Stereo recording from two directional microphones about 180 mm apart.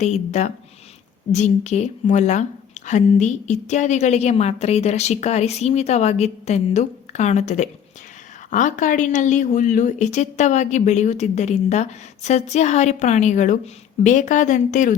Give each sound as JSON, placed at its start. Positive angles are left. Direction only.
{"t": 0.0, "sound": "a woman's voice", "side_deg": 40}